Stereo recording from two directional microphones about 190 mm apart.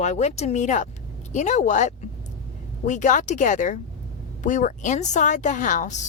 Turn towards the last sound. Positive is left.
turn(degrees=40)  # may be behind; listen again after turning